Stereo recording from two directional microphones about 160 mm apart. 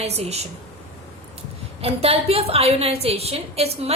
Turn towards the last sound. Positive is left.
turn(degrees=-40)  # may be behind; listen again after turning